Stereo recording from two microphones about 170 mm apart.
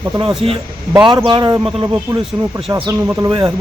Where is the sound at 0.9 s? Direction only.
25° right (ahead or behind).